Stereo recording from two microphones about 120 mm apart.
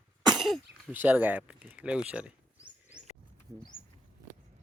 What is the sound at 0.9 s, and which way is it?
Speech, 15° right (ahead or behind).